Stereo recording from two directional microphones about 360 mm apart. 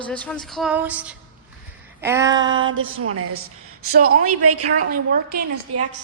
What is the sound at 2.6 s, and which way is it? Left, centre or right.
Speech, right.